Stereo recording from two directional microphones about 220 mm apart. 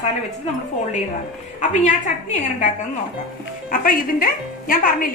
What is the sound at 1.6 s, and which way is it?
Speech, 35° left (ahead or behind).